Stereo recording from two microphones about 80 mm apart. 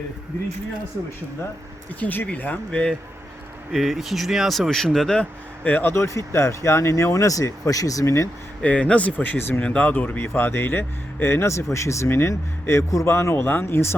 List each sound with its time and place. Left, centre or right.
2.0 s speech: left
3.7 s speech: centre
5.6 s speech: left
5.9 s speech: left
8.6 s speech: centre